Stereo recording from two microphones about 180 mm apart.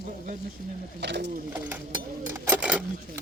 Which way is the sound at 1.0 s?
70° right (ahead or behind).